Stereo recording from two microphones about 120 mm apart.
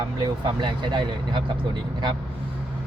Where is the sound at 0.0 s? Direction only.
35° right (ahead or behind).